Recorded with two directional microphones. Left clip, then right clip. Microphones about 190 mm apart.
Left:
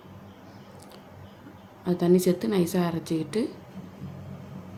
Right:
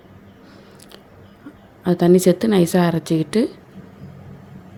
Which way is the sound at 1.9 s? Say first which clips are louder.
Right 8 dB; 45° right (ahead or behind).